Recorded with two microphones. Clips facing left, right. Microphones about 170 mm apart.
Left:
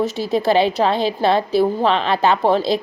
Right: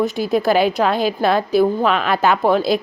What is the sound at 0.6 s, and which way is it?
Speech, 25° left (ahead or behind).